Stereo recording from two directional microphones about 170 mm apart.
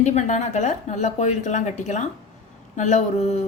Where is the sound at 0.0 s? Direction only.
40° left (ahead or behind).